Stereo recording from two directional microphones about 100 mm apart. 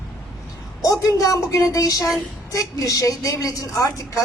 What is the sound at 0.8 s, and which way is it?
A woman's voice, 35° left (ahead or behind).